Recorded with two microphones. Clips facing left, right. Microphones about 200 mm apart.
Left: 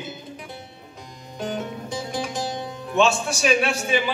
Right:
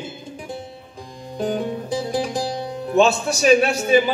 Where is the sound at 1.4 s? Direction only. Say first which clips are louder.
Right 6 dB; 35° right (ahead or behind).